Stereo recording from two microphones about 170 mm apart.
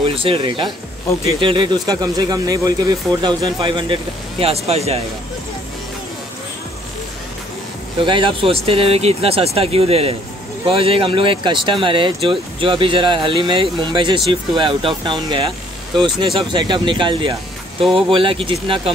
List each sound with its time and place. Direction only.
0.0 s speech: 35° right (ahead or behind)
8.0 s speech: 30° right (ahead or behind)